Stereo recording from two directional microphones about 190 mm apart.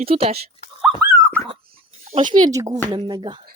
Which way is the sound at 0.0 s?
30° right (ahead or behind).